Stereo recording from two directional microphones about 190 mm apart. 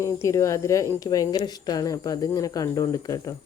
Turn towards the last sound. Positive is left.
turn(degrees=20)  # may be behind; listen again after turning